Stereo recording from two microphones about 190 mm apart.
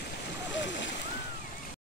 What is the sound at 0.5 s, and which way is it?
Splash, 70° left (ahead or behind).